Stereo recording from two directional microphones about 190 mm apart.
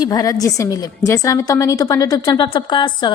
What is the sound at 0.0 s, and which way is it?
A woman's voice, 20° left (ahead or behind).